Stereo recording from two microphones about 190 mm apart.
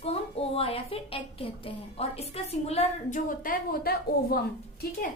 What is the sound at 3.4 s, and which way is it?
Speech, 50° left (ahead or behind).